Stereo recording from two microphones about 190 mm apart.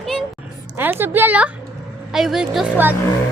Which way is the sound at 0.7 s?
10° right (ahead or behind).